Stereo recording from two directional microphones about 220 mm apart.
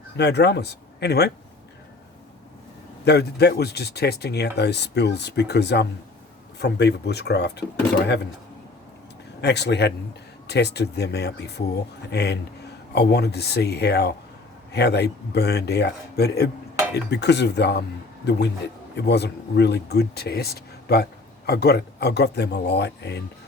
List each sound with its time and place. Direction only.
0.2 s speech: 50° left (ahead or behind)
3.0 s speech: 50° left (ahead or behind)
9.4 s speech: 50° left (ahead or behind)